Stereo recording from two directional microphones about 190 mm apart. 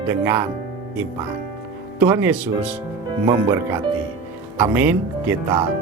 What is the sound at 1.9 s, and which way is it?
Speech, 10° right (ahead or behind).